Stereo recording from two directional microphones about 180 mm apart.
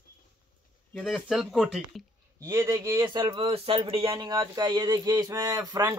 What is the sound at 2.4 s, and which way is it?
A man's voice, 15° right (ahead or behind).